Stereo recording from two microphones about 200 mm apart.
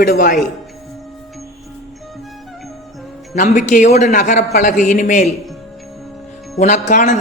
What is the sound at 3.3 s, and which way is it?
A man's voice, 40° left (ahead or behind).